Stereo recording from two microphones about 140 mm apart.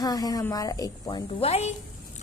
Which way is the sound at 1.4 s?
45° left (ahead or behind).